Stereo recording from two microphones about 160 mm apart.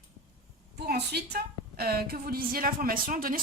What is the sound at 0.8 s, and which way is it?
A woman's voice, 90° right.